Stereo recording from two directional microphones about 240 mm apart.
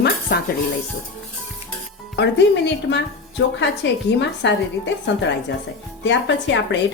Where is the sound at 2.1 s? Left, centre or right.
Left.